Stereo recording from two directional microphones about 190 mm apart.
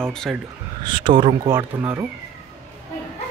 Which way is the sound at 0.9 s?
25° right (ahead or behind).